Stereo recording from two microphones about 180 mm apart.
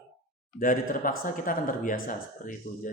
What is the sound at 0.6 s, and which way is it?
Speech, 50° left (ahead or behind).